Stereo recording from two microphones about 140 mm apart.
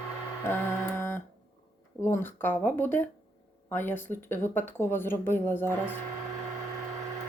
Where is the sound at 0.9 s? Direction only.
15° left (ahead or behind).